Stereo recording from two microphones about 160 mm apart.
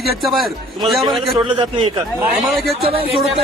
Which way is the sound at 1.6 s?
35° right (ahead or behind).